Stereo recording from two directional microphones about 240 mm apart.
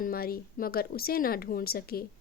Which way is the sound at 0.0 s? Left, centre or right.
Left.